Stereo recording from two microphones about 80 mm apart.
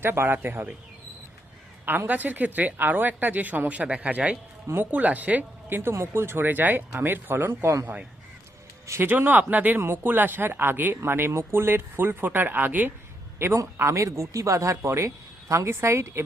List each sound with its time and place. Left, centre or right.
0.0 s speech: right
1.8 s speech: right
8.9 s speech: right